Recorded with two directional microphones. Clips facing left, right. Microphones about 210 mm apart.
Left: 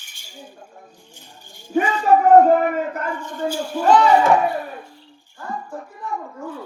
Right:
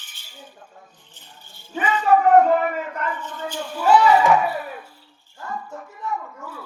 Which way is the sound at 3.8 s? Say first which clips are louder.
Left 1 dB; 5° right (ahead or behind).